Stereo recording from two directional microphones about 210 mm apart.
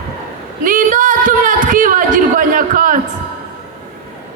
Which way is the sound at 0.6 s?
40° right (ahead or behind).